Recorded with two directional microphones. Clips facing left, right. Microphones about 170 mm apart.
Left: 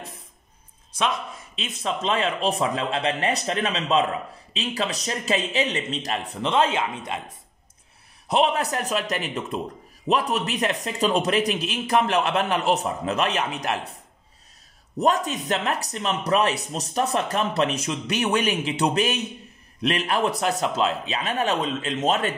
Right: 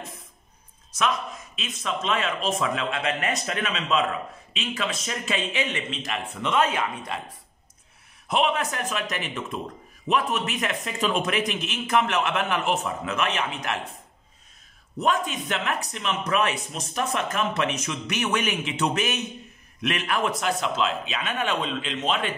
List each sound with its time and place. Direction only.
0.9 s speech: 30° left (ahead or behind)
8.3 s speech: 35° left (ahead or behind)
15.0 s speech: 40° left (ahead or behind)